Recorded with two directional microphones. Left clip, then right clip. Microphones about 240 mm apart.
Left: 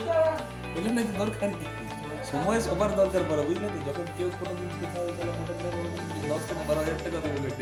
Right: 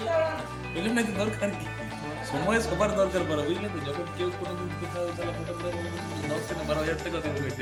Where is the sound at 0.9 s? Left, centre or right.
Centre.